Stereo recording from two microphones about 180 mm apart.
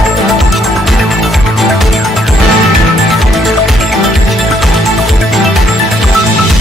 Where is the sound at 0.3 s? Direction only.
Centre (ahead or behind).